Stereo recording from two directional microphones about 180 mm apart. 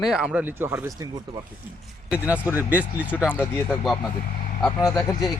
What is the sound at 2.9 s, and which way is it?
Speech, 10° left (ahead or behind).